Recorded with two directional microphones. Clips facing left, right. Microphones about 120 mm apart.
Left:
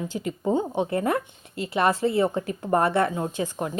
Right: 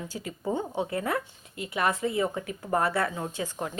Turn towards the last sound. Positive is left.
turn(degrees=20)  # may be behind; listen again after turning